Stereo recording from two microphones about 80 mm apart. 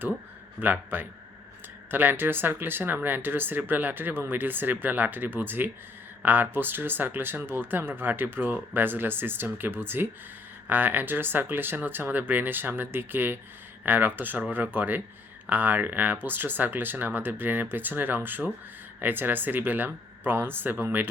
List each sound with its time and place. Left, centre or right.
0.6 s speech: right